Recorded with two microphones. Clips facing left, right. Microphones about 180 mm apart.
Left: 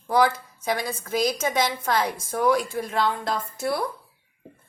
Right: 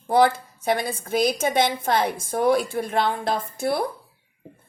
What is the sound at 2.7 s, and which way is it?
Speech, 55° right (ahead or behind).